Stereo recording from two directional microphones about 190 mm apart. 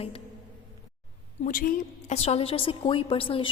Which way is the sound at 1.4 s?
45° left (ahead or behind).